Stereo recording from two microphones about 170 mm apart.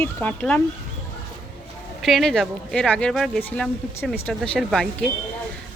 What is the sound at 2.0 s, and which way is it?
Speech, centre (ahead or behind).